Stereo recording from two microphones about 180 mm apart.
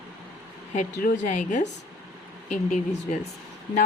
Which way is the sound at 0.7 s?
45° left (ahead or behind).